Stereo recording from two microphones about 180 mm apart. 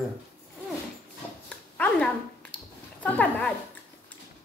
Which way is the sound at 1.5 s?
10° left (ahead or behind).